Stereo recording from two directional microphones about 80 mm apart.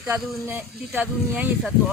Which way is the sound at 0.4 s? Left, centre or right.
Right.